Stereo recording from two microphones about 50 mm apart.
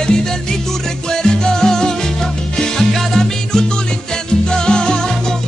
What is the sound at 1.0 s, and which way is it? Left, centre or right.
Salsa music, centre.